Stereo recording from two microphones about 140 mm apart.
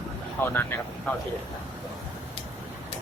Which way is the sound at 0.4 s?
15° left (ahead or behind).